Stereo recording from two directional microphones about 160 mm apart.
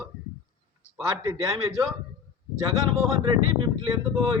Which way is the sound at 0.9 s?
20° right (ahead or behind).